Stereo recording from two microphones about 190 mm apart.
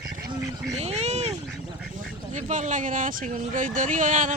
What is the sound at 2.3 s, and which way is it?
Speech, 40° right (ahead or behind).